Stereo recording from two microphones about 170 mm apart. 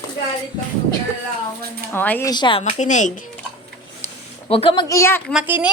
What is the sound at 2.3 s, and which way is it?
Speech, 30° left (ahead or behind).